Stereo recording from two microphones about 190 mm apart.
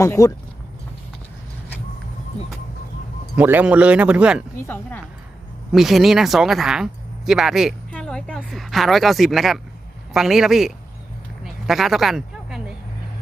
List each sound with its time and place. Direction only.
0.0 s speech: 15° left (ahead or behind)
3.3 s a man's voice: 10° right (ahead or behind)
4.6 s speech: 10° left (ahead or behind)
5.7 s speech: centre (ahead or behind)
11.4 s a sound: centre (ahead or behind)